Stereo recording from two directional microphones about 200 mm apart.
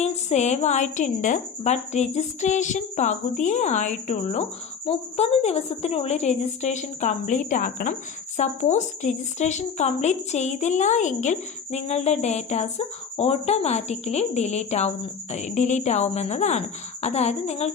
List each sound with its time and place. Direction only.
0.0 s a woman's voice: 35° left (ahead or behind)